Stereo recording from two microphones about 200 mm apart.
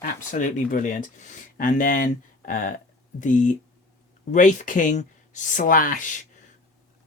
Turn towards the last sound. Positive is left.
turn(degrees=40)  # may be behind; listen again after turning